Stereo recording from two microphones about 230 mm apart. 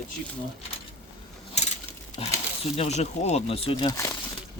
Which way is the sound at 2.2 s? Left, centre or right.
Left.